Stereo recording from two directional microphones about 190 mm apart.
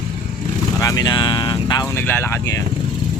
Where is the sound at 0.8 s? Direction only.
20° left (ahead or behind).